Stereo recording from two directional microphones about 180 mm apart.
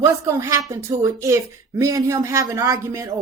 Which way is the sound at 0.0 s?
15° right (ahead or behind).